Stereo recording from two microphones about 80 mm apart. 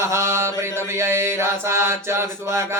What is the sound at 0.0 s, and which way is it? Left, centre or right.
Mantra, right.